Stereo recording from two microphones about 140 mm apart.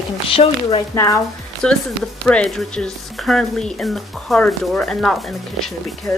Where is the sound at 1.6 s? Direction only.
5° left (ahead or behind).